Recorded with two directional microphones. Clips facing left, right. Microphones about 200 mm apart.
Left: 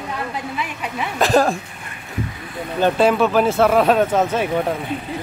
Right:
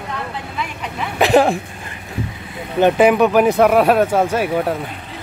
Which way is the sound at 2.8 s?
15° right (ahead or behind).